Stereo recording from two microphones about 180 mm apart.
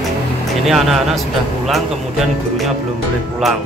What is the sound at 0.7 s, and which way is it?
Speech, centre (ahead or behind).